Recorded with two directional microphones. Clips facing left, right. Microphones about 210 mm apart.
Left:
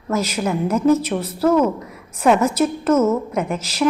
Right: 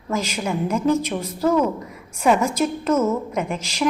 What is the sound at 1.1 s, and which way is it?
Speech, 15° right (ahead or behind).